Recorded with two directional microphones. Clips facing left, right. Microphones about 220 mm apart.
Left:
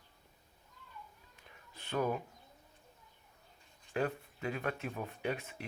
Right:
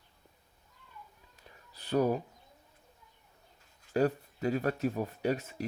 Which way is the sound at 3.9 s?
40° right (ahead or behind).